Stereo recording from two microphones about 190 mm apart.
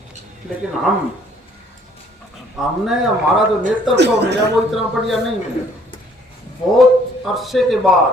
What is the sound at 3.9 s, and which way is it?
Speech, 60° right (ahead or behind).